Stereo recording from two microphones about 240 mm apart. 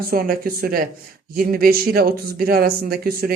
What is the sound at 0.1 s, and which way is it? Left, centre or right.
Speech, right.